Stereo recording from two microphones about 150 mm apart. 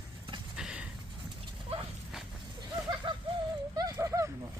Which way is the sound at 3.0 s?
30° right (ahead or behind).